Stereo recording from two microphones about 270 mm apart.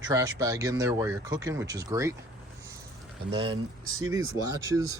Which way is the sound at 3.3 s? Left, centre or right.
Centre.